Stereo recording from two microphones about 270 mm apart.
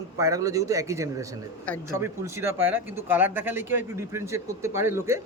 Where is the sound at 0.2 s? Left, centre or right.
Centre.